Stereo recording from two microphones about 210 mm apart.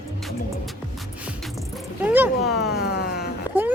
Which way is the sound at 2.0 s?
10° right (ahead or behind).